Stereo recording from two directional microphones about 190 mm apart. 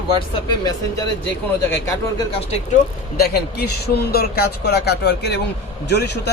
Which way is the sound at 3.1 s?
55° left (ahead or behind).